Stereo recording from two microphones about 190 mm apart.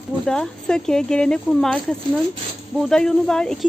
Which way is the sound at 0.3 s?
5° left (ahead or behind).